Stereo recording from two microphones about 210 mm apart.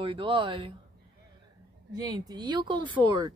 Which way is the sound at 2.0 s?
20° right (ahead or behind).